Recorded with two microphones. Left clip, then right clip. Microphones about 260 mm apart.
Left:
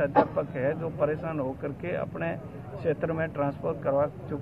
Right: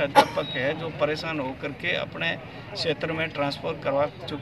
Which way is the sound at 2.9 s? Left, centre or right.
Centre.